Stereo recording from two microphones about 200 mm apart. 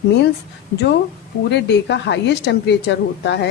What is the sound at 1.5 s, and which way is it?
Speech, 60° left (ahead or behind).